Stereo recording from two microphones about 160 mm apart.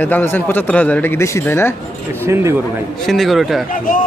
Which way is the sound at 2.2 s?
15° right (ahead or behind).